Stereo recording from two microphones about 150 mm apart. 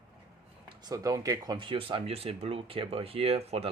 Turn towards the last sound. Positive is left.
turn(degrees=-40)  # may be behind; listen again after turning